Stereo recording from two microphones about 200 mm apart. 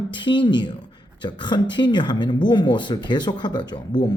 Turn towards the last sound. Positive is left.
turn(degrees=20)  # may be behind; listen again after turning